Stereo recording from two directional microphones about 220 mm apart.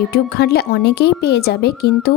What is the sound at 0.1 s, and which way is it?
A woman's voice, 45° left (ahead or behind).